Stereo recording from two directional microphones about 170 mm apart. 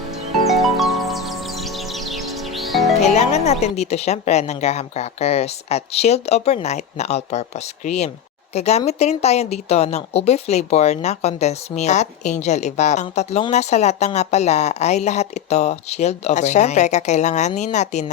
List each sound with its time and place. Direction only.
0.4 s music: centre (ahead or behind)
3.0 s a woman's voice: 40° left (ahead or behind)